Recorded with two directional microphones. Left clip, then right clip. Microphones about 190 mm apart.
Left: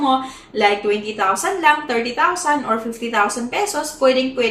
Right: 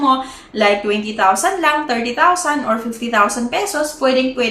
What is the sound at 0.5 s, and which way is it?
A woman's voice, 20° right (ahead or behind).